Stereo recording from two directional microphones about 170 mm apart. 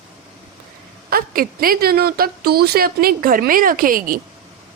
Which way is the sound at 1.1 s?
60° right (ahead or behind).